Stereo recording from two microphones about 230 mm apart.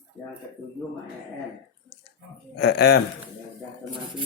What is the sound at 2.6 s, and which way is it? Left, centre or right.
Speech, left.